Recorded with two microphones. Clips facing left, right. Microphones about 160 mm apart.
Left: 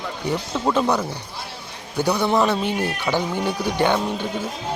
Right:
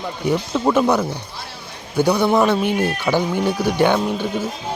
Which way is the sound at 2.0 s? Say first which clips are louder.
Right 3 dB; 10° right (ahead or behind).